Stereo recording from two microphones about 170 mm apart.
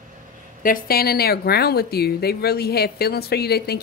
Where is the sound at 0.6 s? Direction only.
60° left (ahead or behind).